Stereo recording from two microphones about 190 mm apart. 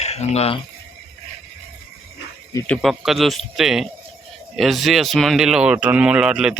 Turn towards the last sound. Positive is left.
turn(degrees=-5)  # may be behind; listen again after turning